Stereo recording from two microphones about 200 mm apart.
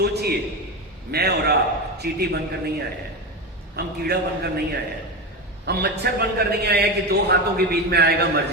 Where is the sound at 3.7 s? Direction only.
55° right (ahead or behind).